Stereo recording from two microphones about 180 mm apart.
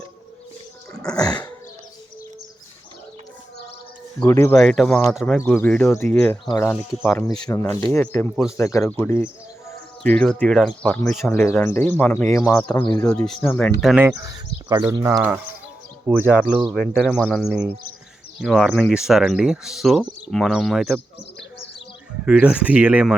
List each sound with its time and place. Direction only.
1.1 s dog: 20° left (ahead or behind)
4.2 s speech: 15° left (ahead or behind)
4.5 s speech: centre (ahead or behind)
5.4 s speech: 10° left (ahead or behind)
13.2 s speech: centre (ahead or behind)
14.3 s speech: 20° right (ahead or behind); by 21.0 s centre (ahead or behind)
22.3 s speech: 5° right (ahead or behind)